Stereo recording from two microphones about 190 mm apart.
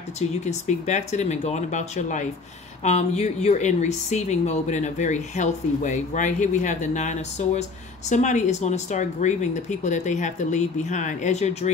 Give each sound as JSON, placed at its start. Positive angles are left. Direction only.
{"t": 0.5, "sound": "speech", "side_deg": 40}